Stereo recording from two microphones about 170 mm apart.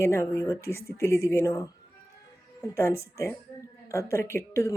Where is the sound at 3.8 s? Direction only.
15° left (ahead or behind).